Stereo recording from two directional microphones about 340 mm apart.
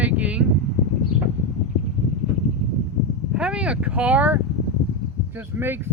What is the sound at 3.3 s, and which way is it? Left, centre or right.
Speech, centre.